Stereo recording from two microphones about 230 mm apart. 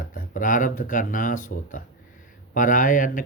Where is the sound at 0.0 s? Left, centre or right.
Left.